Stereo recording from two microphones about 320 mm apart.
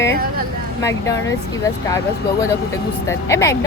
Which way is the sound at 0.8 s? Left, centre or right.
Centre.